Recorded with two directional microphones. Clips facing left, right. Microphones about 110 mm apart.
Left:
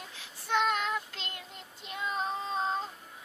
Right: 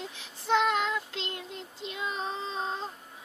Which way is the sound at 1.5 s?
90° right.